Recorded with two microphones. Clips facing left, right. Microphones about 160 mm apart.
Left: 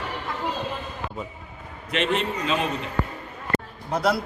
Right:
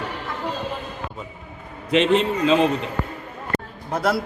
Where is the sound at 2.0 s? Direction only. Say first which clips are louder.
Right 5 dB; 30° right (ahead or behind).